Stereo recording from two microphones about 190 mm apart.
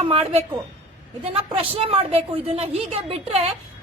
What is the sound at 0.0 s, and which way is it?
A woman's voice, 30° right (ahead or behind).